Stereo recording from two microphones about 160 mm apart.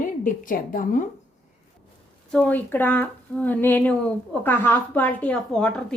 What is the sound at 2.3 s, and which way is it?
Speech, 10° left (ahead or behind).